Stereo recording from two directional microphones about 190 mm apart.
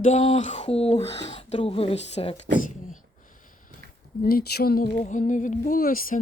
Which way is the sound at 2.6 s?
45° left (ahead or behind).